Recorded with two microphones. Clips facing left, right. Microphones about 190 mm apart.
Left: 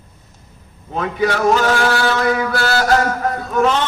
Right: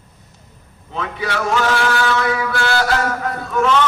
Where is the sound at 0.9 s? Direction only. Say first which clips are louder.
Left 5 dB; 40° left (ahead or behind).